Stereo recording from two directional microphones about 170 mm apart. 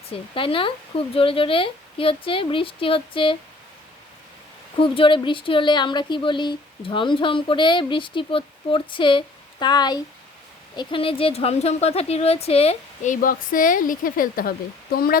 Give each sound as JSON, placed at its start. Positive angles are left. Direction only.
{"t": 0.1, "sound": "speech", "side_deg": 30}
{"t": 4.8, "sound": "speech", "side_deg": 30}
{"t": 14.9, "sound": "a sound", "side_deg": 60}